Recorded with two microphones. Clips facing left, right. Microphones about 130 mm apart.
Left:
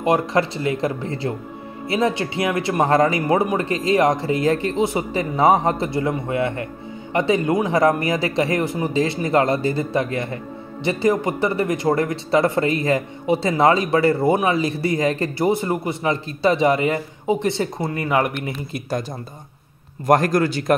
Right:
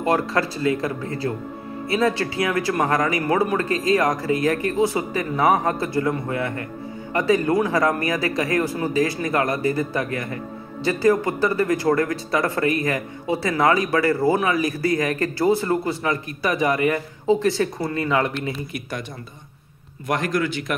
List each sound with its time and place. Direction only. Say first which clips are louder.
0.0 s speech: left 2 dB; 20° left (ahead or behind)
20.1 s a man's voice: left 6 dB; 40° left (ahead or behind)